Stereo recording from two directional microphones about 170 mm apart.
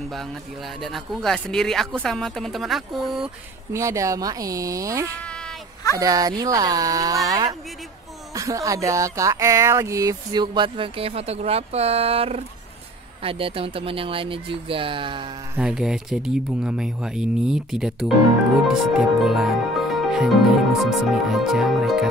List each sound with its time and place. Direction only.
0.7 s speech: centre (ahead or behind)
3.7 s speech: 20° right (ahead or behind)
15.5 s speech: 5° right (ahead or behind)